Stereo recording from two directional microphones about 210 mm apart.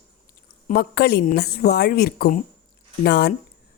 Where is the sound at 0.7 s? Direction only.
50° left (ahead or behind).